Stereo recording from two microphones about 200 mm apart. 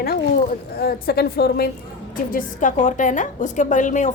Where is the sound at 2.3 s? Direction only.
40° left (ahead or behind).